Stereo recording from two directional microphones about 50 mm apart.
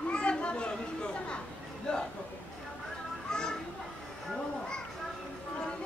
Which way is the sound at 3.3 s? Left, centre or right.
Centre.